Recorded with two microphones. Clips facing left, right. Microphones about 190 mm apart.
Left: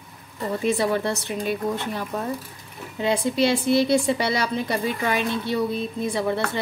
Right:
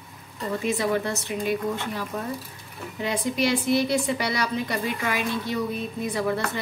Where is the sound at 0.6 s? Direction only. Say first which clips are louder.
Left 3 dB; 30° left (ahead or behind).